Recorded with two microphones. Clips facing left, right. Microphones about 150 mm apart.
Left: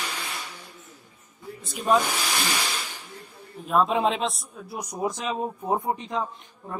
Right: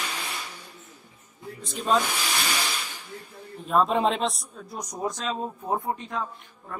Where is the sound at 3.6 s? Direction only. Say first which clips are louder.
Even; centre (ahead or behind).